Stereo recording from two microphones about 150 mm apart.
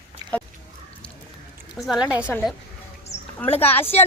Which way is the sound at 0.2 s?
25° right (ahead or behind).